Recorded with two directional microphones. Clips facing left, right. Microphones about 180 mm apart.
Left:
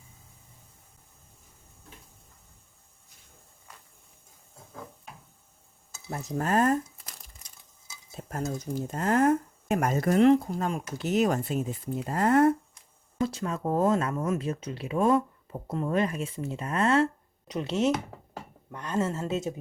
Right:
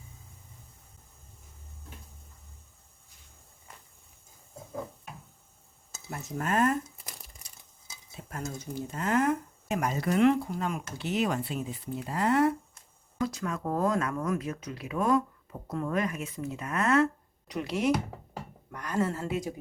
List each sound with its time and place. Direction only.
6.1 s speech: 35° left (ahead or behind)
8.1 s speech: 40° left (ahead or behind)
12.7 s speech: 25° left (ahead or behind)